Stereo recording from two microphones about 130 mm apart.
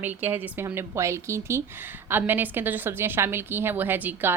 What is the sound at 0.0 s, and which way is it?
A woman's voice, 15° right (ahead or behind).